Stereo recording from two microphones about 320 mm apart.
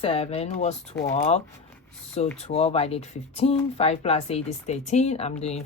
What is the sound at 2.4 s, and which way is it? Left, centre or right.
Speech, centre.